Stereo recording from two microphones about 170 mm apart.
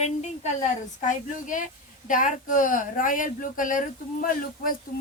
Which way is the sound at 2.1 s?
50° left (ahead or behind).